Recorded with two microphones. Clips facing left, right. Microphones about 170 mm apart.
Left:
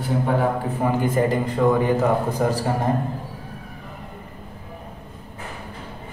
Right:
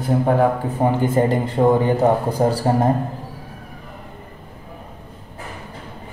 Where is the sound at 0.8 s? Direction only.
30° right (ahead or behind).